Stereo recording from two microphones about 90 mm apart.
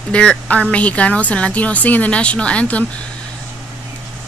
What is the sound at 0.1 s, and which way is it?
Speech, 10° left (ahead or behind).